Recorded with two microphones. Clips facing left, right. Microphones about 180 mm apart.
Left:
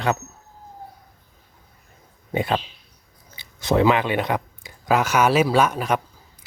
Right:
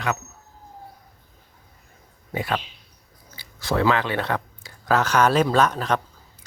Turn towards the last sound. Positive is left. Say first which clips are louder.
# left 1 dB
turn(degrees=10)  # may be behind; listen again after turning